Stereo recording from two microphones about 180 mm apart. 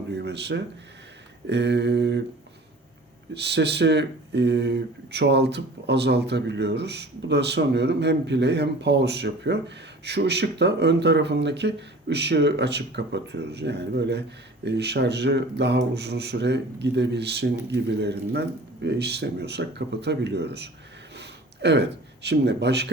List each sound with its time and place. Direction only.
0.1 s speech: 70° right (ahead or behind)
3.4 s speech: 70° right (ahead or behind)
21.2 s a sound: 70° right (ahead or behind)